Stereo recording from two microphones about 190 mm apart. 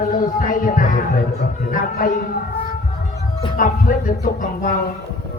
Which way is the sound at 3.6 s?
45° left (ahead or behind).